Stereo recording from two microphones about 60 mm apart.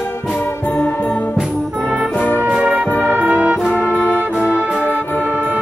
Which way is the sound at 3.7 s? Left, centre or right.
Left.